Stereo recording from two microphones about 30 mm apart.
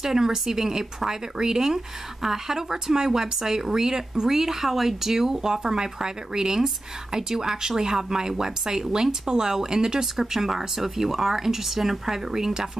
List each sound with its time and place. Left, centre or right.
0.0 s speech: centre